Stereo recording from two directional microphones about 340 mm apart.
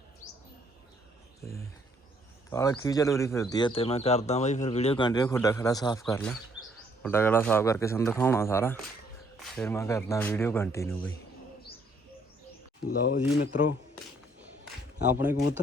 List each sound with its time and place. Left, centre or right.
2.5 s speech: centre
12.9 s speech: left
15.1 s speech: centre